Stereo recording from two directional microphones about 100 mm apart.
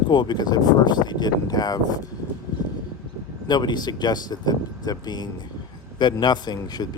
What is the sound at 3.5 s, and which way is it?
Speech, 45° left (ahead or behind).